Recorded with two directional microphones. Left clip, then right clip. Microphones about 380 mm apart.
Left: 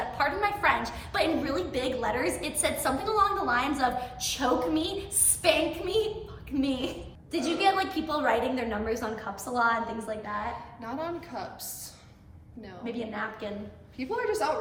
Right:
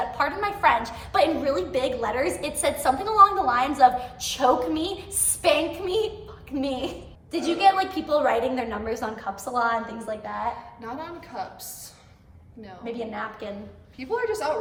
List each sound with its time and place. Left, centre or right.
0.2 s a woman's voice: centre
12.8 s a woman's voice: centre